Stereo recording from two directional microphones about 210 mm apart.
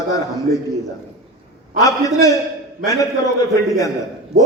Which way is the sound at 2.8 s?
15° left (ahead or behind).